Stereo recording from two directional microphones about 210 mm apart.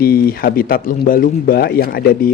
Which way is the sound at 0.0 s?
45° left (ahead or behind).